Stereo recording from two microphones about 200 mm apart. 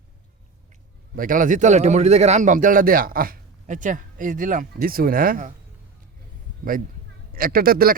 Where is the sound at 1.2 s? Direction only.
45° right (ahead or behind).